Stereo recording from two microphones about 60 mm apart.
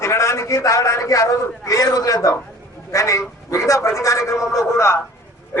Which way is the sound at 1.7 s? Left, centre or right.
Left.